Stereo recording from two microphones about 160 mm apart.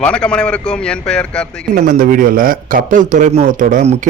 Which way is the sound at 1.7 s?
60° right (ahead or behind).